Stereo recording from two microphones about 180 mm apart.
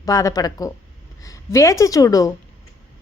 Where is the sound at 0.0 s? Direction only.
15° left (ahead or behind).